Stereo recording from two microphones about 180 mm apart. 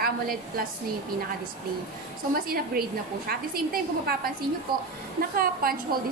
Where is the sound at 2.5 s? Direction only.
55° right (ahead or behind).